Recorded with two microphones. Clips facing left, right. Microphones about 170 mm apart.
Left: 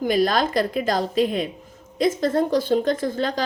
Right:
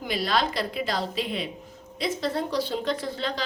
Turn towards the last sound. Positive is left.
turn(degrees=45)  # may be behind; listen again after turning